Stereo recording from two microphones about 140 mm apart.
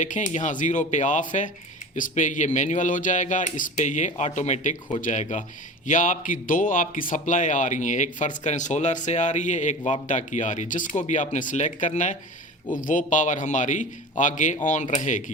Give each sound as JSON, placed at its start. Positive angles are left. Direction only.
{"t": 0.0, "sound": "a man's voice", "side_deg": 60}